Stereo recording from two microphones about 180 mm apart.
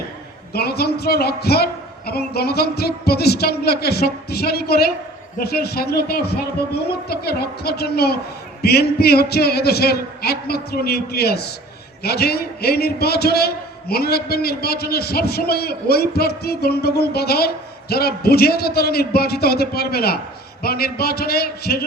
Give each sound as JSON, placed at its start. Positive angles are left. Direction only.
{"t": 0.5, "sound": "a man's voice", "side_deg": 60}